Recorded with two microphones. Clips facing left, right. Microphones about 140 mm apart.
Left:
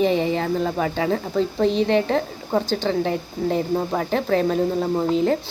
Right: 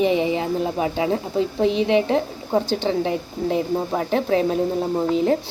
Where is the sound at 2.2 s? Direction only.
25° right (ahead or behind).